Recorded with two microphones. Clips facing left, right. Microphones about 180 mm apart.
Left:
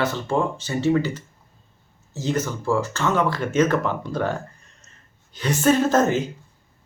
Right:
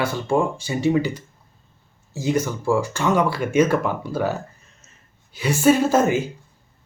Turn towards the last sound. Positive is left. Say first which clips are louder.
# right 1 dB
turn(degrees=-10)  # may be behind; listen again after turning